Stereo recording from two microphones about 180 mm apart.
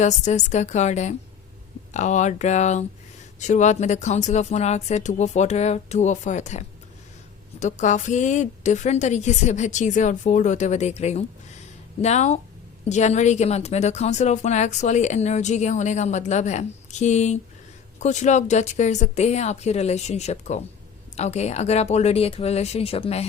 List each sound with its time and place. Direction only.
0.0 s a woman's voice: 40° left (ahead or behind)